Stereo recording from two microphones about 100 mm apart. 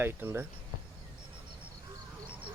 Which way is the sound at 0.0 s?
20° right (ahead or behind).